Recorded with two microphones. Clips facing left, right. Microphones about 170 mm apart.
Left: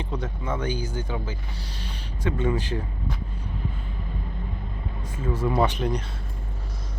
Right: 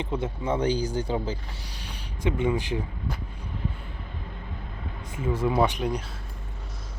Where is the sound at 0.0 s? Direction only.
25° right (ahead or behind).